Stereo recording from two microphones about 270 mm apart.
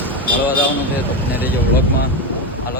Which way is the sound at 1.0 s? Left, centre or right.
Centre.